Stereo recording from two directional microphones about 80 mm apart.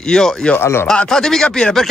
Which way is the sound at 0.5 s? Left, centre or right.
Left.